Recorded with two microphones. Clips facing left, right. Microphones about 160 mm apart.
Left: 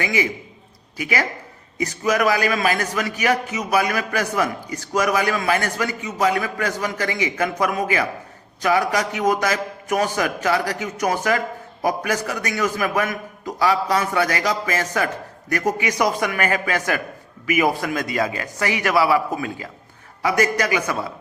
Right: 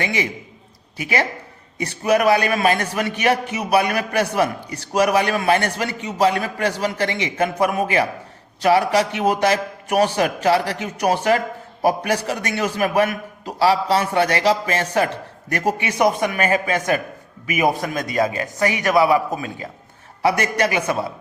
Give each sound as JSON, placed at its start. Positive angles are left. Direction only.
{"t": 1.0, "sound": "a man's voice", "side_deg": -30}